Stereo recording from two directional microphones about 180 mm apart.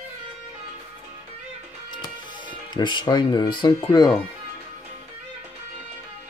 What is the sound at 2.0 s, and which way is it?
Speech, 25° left (ahead or behind).